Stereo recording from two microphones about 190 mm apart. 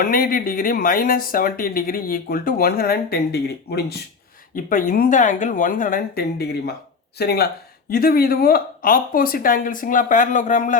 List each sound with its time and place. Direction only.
0.0 s speech: 50° left (ahead or behind)
4.5 s speech: 45° left (ahead or behind)